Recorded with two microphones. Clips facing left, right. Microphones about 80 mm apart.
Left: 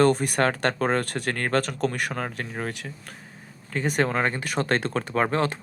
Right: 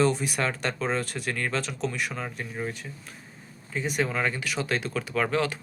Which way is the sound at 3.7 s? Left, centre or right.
Left.